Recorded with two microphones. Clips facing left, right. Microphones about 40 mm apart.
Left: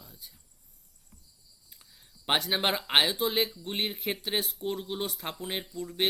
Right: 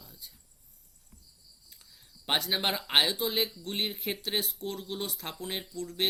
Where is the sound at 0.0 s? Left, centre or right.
Centre.